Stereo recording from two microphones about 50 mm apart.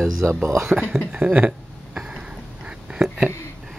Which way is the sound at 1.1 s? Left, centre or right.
Right.